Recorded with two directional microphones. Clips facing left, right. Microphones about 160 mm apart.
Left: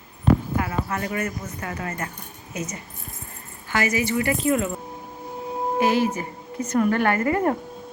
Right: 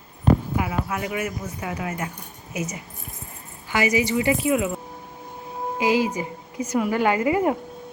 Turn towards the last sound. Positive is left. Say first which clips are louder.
# right 1 dB
turn(degrees=-10)  # may be behind; listen again after turning